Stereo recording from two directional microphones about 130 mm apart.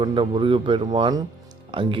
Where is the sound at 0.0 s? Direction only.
40° right (ahead or behind).